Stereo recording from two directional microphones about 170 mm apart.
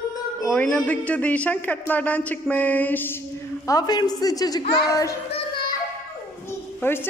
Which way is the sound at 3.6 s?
20° left (ahead or behind).